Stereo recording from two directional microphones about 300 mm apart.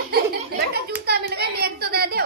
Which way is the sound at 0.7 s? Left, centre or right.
Right.